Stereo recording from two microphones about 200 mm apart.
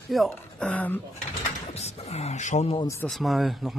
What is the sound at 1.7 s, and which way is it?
Speech, 35° left (ahead or behind).